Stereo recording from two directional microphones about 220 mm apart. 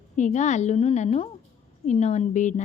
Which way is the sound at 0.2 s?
35° left (ahead or behind).